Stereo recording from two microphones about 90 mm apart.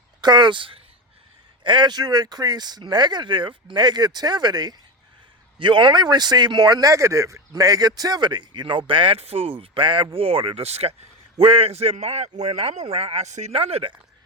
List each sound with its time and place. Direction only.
0.2 s speech: 55° right (ahead or behind); by 0.8 s 70° right (ahead or behind)
1.6 s speech: 55° right (ahead or behind)
5.5 s speech: 65° right (ahead or behind)
8.9 s speech: 75° right (ahead or behind)